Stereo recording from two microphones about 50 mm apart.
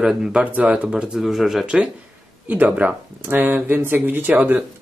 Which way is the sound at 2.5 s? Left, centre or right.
Right.